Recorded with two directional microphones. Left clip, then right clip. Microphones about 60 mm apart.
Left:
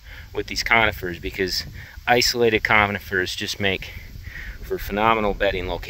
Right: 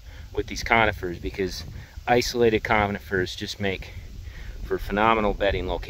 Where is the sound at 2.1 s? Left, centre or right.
Right.